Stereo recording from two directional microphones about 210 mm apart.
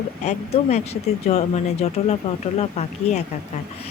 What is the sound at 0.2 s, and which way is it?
Speech, 30° left (ahead or behind).